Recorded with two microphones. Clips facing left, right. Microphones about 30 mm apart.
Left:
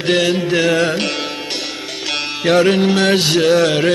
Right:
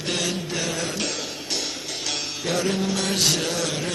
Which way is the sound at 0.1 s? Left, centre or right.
Left.